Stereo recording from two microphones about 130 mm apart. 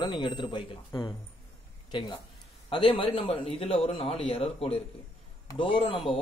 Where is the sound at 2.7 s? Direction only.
40° left (ahead or behind).